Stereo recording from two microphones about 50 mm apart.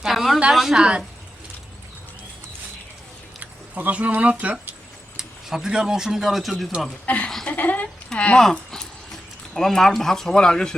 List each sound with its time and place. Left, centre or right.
0.1 s a sound: centre
0.5 s a woman's voice: centre
3.4 s speech: right
5.1 s speech: centre
7.0 s speech: left
8.1 s speech: left
9.6 s speech: centre